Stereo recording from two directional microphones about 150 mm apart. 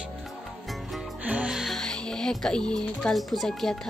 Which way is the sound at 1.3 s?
5° right (ahead or behind).